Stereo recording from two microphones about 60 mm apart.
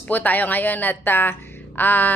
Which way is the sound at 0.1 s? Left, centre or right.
Left.